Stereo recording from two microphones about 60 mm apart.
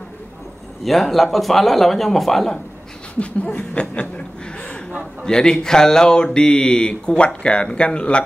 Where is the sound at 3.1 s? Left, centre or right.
Left.